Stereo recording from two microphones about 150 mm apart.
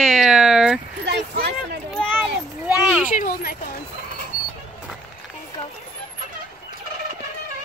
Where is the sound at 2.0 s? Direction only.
5° left (ahead or behind).